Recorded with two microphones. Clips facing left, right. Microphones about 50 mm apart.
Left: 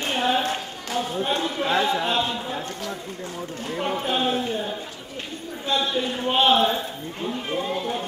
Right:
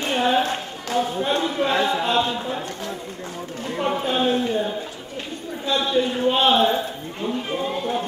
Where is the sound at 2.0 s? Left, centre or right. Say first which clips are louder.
Right 3 dB; centre.